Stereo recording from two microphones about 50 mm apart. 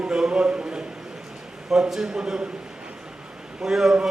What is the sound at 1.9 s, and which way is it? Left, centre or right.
Speech, centre.